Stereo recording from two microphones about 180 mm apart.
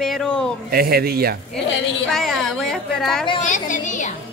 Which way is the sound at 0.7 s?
55° right (ahead or behind).